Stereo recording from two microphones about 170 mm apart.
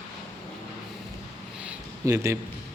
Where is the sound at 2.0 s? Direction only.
20° right (ahead or behind).